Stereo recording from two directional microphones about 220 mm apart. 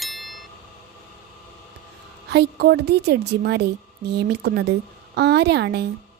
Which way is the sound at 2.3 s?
45° right (ahead or behind).